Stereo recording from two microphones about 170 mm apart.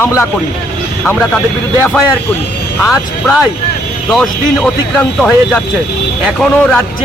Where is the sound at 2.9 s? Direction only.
Centre (ahead or behind).